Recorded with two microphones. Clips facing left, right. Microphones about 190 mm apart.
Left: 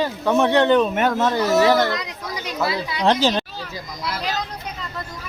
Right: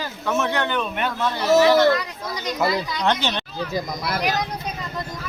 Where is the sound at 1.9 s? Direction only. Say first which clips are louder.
Right 3 dB; 20° left (ahead or behind).